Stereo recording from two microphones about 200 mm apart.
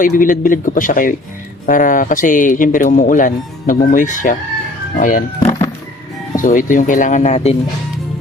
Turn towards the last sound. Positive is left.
turn(degrees=35)  # may be behind; listen again after turning